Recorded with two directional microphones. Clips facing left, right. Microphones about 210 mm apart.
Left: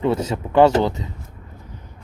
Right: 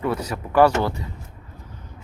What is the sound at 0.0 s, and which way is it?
Speech, 25° left (ahead or behind).